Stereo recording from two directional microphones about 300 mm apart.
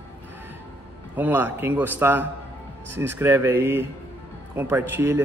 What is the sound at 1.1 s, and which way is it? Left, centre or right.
Speech, centre.